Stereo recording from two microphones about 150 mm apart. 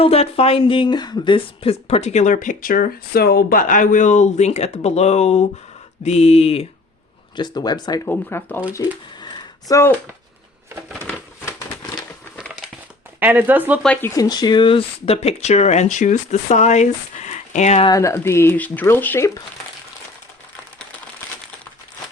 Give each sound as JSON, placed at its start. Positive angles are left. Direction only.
{"t": 0.0, "sound": "a woman's voice", "side_deg": 40}
{"t": 7.3, "sound": "speech", "side_deg": 30}
{"t": 8.0, "sound": "speech", "side_deg": 15}
{"t": 8.7, "sound": "speech", "side_deg": 25}
{"t": 13.1, "sound": "speech", "side_deg": -10}
{"t": 13.8, "sound": "speech", "side_deg": 10}
{"t": 14.2, "sound": "a woman's voice", "side_deg": 25}
{"t": 17.8, "sound": "speech", "side_deg": 20}